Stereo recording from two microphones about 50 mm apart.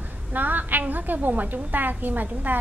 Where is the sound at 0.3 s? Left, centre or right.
Right.